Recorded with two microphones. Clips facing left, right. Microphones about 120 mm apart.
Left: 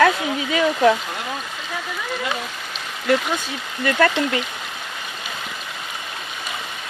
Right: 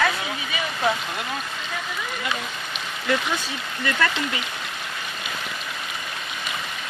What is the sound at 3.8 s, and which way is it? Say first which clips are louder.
Speech: left 6 dB; 45° left (ahead or behind).